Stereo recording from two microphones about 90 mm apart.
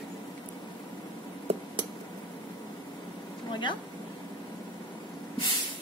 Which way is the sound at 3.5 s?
60° left (ahead or behind).